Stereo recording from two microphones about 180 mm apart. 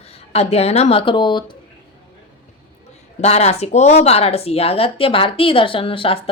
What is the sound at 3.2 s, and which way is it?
A woman's voice, 35° left (ahead or behind).